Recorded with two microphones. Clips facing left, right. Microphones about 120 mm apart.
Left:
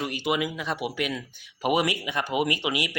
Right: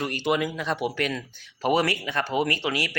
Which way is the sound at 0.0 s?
5° left (ahead or behind).